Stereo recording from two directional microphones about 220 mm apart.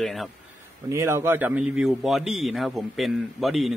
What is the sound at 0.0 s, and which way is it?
Speech, centre (ahead or behind).